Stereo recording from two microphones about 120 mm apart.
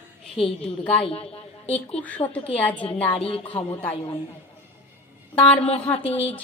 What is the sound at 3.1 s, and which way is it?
Speech, 50° left (ahead or behind).